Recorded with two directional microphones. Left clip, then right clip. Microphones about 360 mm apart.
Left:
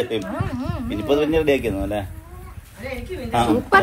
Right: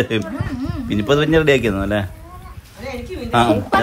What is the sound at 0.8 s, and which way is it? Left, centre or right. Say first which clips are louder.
Speech: right 3 dB; right.